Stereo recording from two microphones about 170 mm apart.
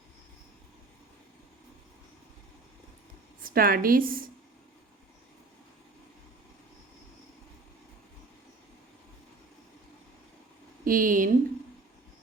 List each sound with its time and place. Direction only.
3.4 s a woman's voice: 60° right (ahead or behind)
10.8 s a woman's voice: 55° right (ahead or behind)